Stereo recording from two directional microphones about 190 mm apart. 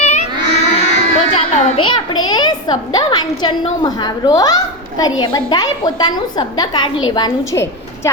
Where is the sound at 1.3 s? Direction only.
30° left (ahead or behind).